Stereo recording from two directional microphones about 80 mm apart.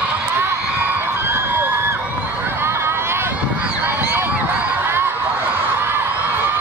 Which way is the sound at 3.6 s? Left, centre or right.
Right.